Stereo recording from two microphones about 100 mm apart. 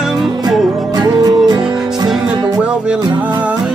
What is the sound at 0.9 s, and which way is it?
Music, 40° right (ahead or behind).